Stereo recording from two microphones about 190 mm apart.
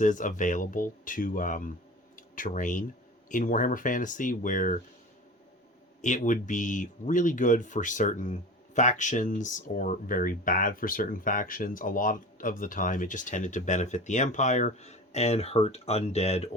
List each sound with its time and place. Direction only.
0.0 s speech: 40° left (ahead or behind)
6.0 s speech: 40° left (ahead or behind)